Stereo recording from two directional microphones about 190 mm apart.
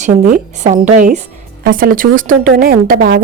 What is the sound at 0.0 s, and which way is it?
A woman's voice, 40° right (ahead or behind).